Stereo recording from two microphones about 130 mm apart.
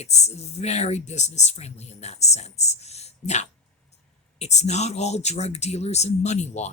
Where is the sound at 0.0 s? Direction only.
55° left (ahead or behind).